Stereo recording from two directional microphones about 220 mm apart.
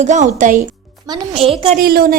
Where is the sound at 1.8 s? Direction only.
40° right (ahead or behind).